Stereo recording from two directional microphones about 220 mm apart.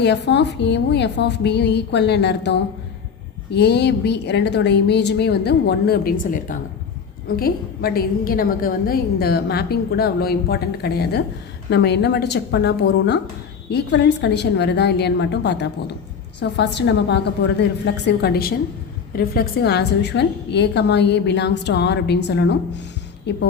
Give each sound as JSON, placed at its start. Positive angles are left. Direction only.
{"t": 0.0, "sound": "a woman's voice", "side_deg": 50}